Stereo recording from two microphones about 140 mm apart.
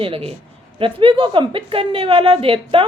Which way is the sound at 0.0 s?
40° right (ahead or behind).